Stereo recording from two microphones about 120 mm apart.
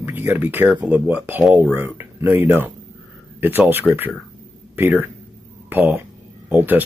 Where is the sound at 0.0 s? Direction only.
15° right (ahead or behind).